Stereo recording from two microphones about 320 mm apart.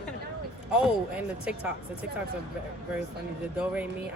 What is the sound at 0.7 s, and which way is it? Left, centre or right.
Speech, centre.